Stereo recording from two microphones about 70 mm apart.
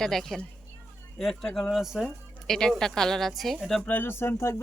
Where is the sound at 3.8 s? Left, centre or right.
Left.